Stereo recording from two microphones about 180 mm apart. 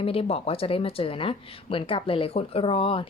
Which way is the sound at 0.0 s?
30° left (ahead or behind).